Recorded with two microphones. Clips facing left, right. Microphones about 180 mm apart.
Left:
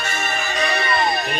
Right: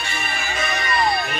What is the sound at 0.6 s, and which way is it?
Music, 35° left (ahead or behind).